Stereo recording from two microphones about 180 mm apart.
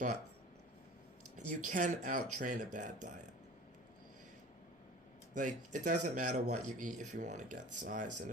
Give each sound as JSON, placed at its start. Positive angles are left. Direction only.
{"t": 1.5, "sound": "speech", "side_deg": -45}
{"t": 5.3, "sound": "speech", "side_deg": -45}